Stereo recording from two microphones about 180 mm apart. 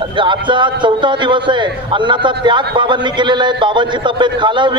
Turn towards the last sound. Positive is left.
turn(degrees=-25)  # may be behind; listen again after turning